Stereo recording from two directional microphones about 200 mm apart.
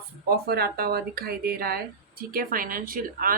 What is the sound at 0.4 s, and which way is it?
A woman's voice, 50° right (ahead or behind).